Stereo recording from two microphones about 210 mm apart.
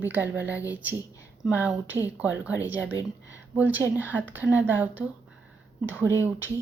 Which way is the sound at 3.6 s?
10° right (ahead or behind).